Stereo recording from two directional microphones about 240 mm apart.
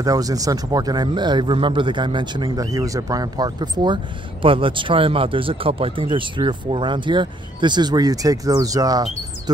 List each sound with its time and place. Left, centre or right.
0.0 s speech: centre